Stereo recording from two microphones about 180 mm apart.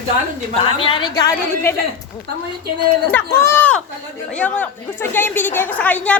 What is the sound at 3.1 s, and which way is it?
A woman's voice, 10° left (ahead or behind).